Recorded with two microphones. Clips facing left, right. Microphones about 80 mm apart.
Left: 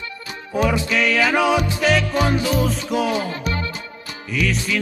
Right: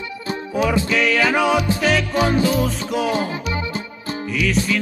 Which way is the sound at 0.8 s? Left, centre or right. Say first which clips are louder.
Right 1 dB; centre.